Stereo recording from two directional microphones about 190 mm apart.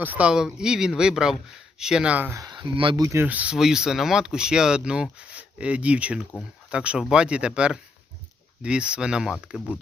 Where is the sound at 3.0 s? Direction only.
10° right (ahead or behind).